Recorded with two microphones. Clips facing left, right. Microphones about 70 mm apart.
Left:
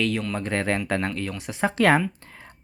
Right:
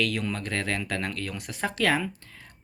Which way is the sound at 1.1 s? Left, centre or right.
Centre.